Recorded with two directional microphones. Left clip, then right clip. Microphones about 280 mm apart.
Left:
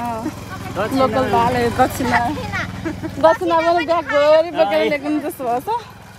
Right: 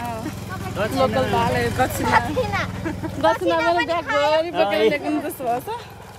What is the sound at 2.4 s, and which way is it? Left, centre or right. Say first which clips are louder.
Speech: even; right.